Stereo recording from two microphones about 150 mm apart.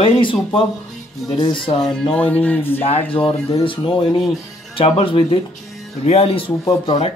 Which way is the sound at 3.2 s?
35° left (ahead or behind).